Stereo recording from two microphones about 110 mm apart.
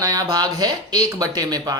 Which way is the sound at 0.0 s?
35° right (ahead or behind).